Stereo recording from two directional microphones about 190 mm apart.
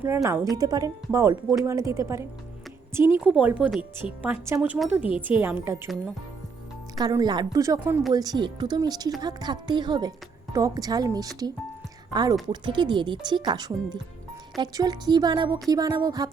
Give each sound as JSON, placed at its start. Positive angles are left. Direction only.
{"t": 0.0, "sound": "speech", "side_deg": -15}
{"t": 7.0, "sound": "speech", "side_deg": -20}